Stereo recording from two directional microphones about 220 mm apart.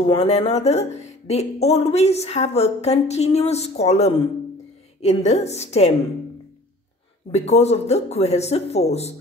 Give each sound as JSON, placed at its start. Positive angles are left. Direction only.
{"t": 0.1, "sound": "speech", "side_deg": 25}
{"t": 7.2, "sound": "speech", "side_deg": 30}